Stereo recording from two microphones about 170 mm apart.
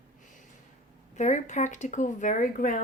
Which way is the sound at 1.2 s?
45° left (ahead or behind).